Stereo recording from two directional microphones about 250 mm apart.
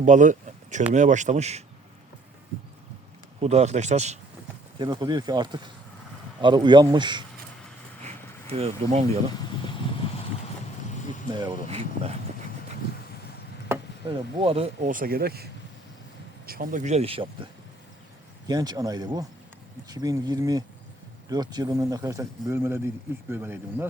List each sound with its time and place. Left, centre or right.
0.0 s speech: right
3.4 s speech: right
8.0 s vehicle: right
11.3 s speech: centre
13.7 s chop: centre
14.1 s speech: right
16.5 s speech: right; by 23.9 s centre